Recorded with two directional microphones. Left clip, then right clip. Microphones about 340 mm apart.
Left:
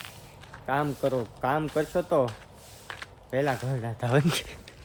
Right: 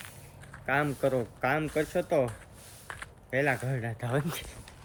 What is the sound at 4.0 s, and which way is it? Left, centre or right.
Speech, left.